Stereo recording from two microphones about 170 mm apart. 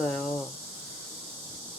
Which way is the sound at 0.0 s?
Centre (ahead or behind).